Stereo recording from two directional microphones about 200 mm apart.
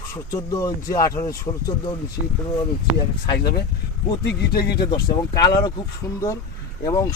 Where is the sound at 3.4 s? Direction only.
20° left (ahead or behind).